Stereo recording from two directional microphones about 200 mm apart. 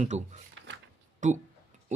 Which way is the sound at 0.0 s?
35° right (ahead or behind).